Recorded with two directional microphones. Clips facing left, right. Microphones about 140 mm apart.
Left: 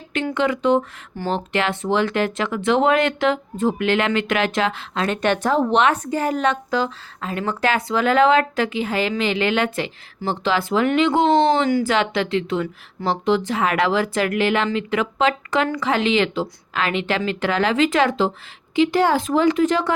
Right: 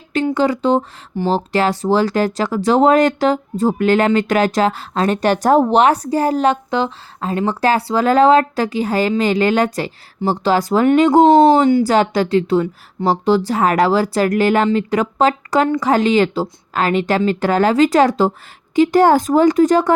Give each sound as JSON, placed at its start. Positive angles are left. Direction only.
{"t": 0.3, "sound": "speech", "side_deg": -35}